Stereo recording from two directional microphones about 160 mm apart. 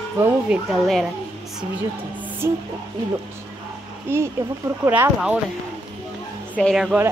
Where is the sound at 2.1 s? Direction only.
10° right (ahead or behind).